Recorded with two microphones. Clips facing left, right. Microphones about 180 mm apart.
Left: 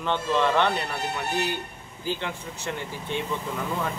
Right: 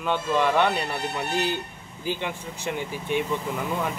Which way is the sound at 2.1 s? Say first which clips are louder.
Right 1 dB; 15° right (ahead or behind).